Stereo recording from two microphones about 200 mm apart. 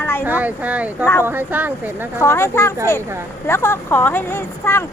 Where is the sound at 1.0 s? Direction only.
15° left (ahead or behind).